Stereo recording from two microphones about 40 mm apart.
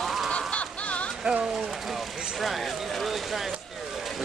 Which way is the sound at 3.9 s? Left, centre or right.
Centre.